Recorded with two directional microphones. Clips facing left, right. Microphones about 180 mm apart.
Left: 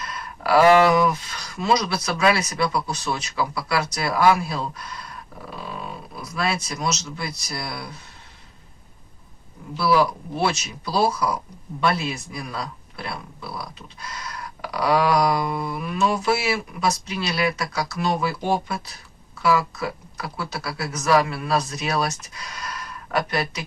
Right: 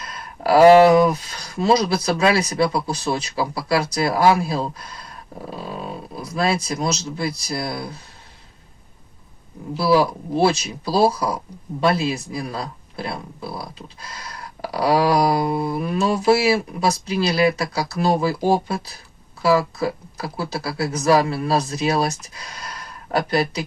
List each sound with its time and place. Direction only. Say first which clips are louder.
0.1 s speech: right 3 dB; 30° right (ahead or behind)
9.7 s speech: right 2 dB; 30° right (ahead or behind)